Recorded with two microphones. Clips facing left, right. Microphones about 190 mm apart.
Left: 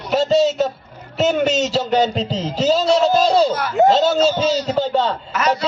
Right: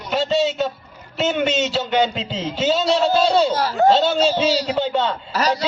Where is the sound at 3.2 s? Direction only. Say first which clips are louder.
Left 1 dB; 40° left (ahead or behind).